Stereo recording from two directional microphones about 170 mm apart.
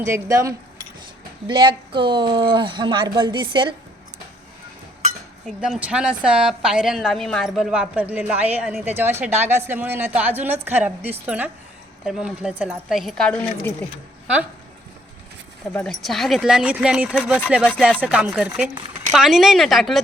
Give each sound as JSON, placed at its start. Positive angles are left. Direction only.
{"t": 0.0, "sound": "a woman's voice", "side_deg": -15}
{"t": 1.5, "sound": "speech", "side_deg": -30}
{"t": 5.5, "sound": "a woman's voice", "side_deg": 0}
{"t": 15.7, "sound": "speech", "side_deg": 5}